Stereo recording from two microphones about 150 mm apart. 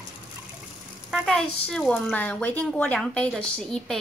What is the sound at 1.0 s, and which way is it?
Speech, centre (ahead or behind).